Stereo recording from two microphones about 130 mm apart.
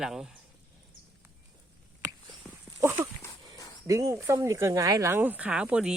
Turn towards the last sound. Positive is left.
turn(degrees=-5)  # may be behind; listen again after turning